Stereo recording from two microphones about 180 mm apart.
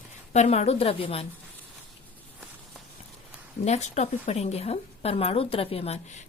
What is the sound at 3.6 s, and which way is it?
A woman's voice, 40° left (ahead or behind).